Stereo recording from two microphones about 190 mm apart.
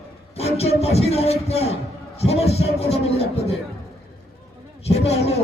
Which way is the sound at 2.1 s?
35° left (ahead or behind).